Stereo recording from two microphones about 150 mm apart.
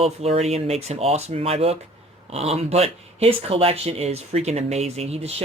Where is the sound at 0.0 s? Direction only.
45° right (ahead or behind).